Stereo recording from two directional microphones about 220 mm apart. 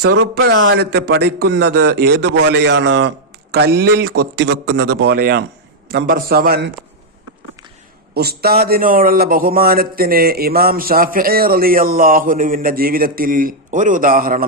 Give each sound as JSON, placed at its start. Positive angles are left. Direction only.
{"t": 0.0, "sound": "speech", "side_deg": -45}
{"t": 8.1, "sound": "a man's voice", "side_deg": -45}